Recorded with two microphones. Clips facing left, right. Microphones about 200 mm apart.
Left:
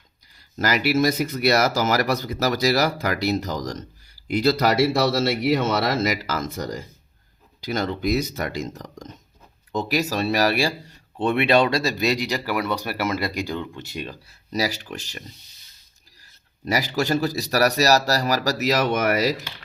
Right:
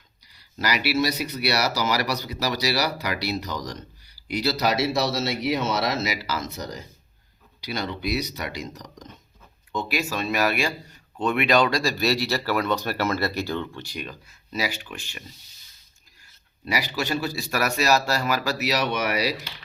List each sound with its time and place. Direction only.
0.3 s a man's voice: 45° left (ahead or behind)
16.6 s a man's voice: 45° left (ahead or behind)